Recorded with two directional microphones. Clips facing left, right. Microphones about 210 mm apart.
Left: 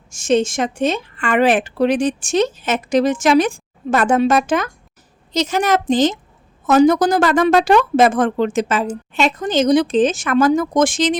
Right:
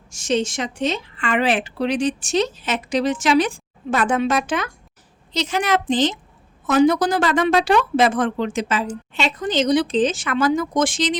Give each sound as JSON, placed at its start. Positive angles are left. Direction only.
{"t": 0.1, "sound": "a woman's voice", "side_deg": 50}